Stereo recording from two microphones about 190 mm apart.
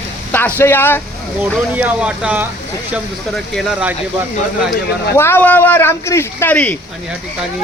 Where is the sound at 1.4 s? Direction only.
10° right (ahead or behind).